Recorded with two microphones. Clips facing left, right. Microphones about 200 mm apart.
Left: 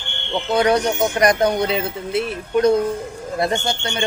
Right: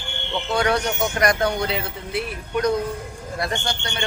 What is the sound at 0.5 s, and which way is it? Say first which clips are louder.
Speech: left 5 dB; 20° left (ahead or behind).